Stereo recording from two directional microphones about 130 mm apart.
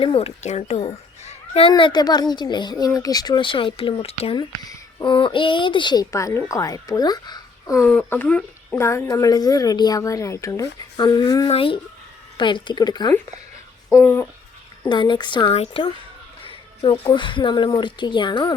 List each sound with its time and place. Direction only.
0.0 s a child's voice: 50° left (ahead or behind)
1.7 s speech: 35° left (ahead or behind); by 4.4 s 50° left (ahead or behind)
4.4 s speech: 25° left (ahead or behind)
5.0 s speech: 40° left (ahead or behind)
6.1 s a woman's voice: 25° left (ahead or behind)
8.1 s speech: 10° left (ahead or behind)
8.8 s a woman's voice: 20° left (ahead or behind)
11.4 s speech: 45° left (ahead or behind)
13.9 s a woman's voice: 20° left (ahead or behind)
14.8 s speech: 35° left (ahead or behind)
15.5 s speech: 50° left (ahead or behind)